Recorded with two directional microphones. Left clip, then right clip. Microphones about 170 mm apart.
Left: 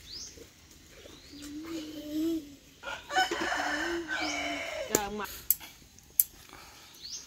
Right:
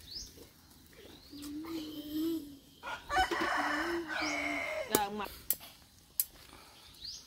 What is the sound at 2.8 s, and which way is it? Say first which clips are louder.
Crowing: left 3 dB; 60° left (ahead or behind).